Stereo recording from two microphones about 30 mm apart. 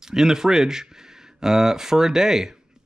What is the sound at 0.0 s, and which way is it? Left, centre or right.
Speech, centre.